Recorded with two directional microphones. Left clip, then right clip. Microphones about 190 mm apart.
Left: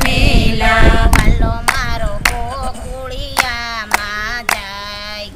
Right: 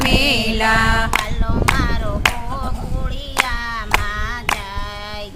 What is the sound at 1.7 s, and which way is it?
Clapping, 60° left (ahead or behind).